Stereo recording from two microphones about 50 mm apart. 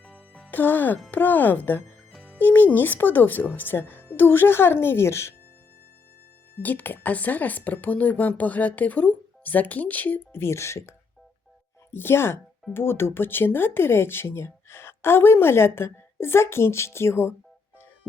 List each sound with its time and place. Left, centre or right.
0.0 s music: centre
0.5 s speech: left
2.1 s music: centre
2.4 s speech: left
6.6 s speech: left
10.3 s speech: left
11.9 s speech: left